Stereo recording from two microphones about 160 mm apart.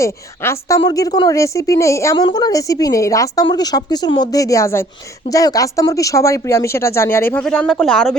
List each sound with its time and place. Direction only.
0.0 s a woman's voice: 20° left (ahead or behind); by 8.2 s 5° left (ahead or behind)